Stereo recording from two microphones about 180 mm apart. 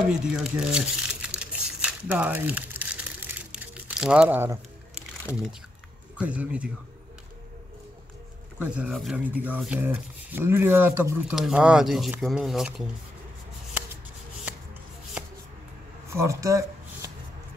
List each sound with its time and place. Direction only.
0.1 s crumpling: 5° right (ahead or behind)
5.3 s speech: 5° right (ahead or behind)
8.7 s speech: 5° right (ahead or behind)
16.1 s shuffling cards: 15° right (ahead or behind)